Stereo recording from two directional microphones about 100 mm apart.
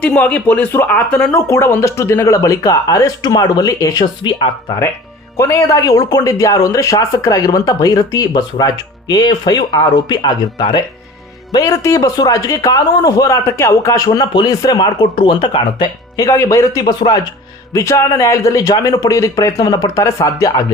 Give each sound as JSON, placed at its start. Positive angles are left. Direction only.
{"t": 0.0, "sound": "speech", "side_deg": 10}
{"t": 1.3, "sound": "speech", "side_deg": 25}
{"t": 4.2, "sound": "speech", "side_deg": 55}
{"t": 5.4, "sound": "speech", "side_deg": 30}
{"t": 11.5, "sound": "speech", "side_deg": 35}
{"t": 16.2, "sound": "speech", "side_deg": 30}
{"t": 16.8, "sound": "speech", "side_deg": 50}
{"t": 17.7, "sound": "speech", "side_deg": 30}